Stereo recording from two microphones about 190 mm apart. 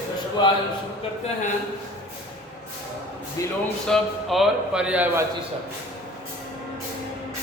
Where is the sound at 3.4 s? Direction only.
15° left (ahead or behind).